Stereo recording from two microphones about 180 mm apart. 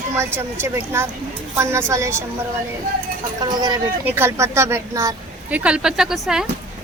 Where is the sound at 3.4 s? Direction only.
25° right (ahead or behind).